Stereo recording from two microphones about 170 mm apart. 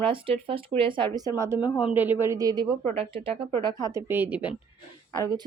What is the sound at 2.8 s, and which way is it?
Speech, 35° right (ahead or behind).